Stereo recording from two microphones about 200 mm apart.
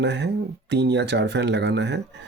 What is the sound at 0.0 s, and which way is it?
Speech, 60° right (ahead or behind).